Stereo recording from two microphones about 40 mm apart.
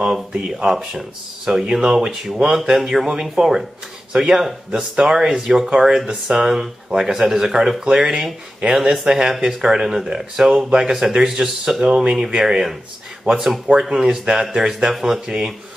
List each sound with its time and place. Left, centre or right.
0.3 s speech: right
11.8 s speech: right
15.1 s speech: right